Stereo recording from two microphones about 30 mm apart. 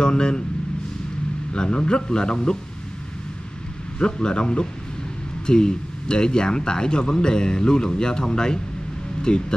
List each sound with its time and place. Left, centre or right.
0.0 s speech: left
1.5 s speech: left
4.0 s speech: left